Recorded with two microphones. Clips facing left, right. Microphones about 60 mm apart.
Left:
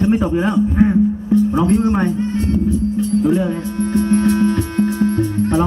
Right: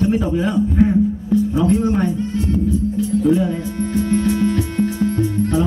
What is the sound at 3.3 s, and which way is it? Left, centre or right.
Music, left.